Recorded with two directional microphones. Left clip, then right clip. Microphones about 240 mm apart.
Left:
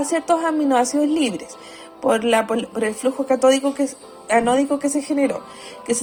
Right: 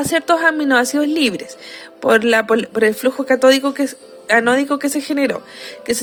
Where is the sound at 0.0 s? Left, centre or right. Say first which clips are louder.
Right 5 dB; right.